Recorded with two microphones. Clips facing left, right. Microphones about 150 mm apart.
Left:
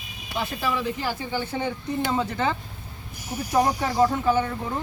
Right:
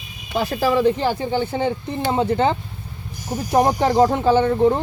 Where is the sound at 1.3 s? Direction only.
25° right (ahead or behind).